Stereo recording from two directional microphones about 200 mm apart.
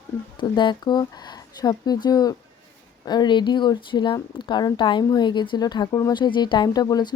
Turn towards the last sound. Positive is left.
turn(degrees=20)  # may be behind; listen again after turning